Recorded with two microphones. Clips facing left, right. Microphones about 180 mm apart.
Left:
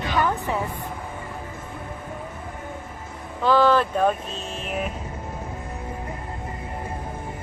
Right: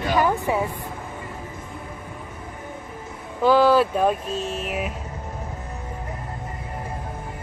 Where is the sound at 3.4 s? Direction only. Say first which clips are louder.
Right 2 dB; 10° right (ahead or behind).